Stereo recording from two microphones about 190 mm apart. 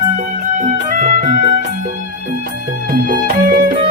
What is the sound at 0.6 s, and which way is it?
Music, 45° right (ahead or behind).